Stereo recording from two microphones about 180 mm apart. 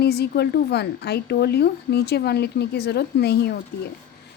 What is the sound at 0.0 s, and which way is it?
A woman's voice, 65° left (ahead or behind).